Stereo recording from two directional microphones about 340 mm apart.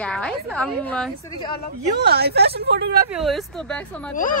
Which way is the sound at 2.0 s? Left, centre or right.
Right.